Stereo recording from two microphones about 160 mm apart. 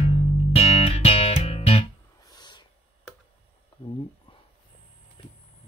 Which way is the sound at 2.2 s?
25° left (ahead or behind).